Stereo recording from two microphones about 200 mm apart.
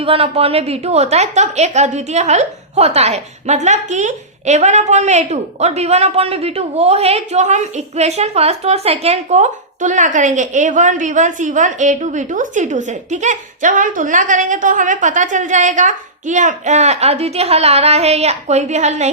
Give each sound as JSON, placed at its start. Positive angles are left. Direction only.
{"t": 0.0, "sound": "a woman's voice", "side_deg": -30}